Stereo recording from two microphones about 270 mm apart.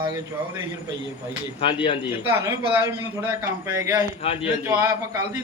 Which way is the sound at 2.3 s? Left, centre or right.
Centre.